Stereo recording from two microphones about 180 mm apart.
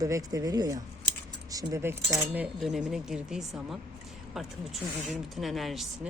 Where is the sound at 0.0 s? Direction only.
20° right (ahead or behind).